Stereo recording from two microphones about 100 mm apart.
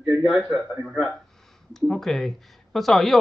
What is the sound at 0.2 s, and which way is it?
Speech, centre (ahead or behind).